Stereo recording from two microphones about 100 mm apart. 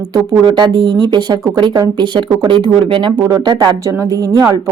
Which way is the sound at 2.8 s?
60° right (ahead or behind).